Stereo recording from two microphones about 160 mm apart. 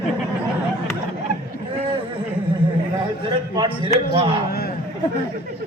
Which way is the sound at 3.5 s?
30° right (ahead or behind).